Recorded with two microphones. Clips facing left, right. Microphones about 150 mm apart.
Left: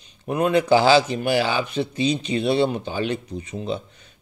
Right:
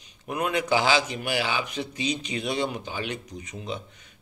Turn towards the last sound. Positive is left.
turn(degrees=30)  # may be behind; listen again after turning